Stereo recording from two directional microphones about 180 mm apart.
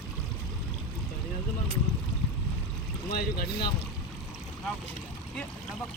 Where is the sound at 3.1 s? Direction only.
60° left (ahead or behind).